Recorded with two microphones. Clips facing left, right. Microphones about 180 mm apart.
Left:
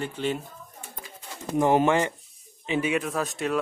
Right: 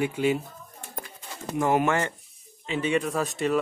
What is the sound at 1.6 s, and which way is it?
Speech, 25° left (ahead or behind).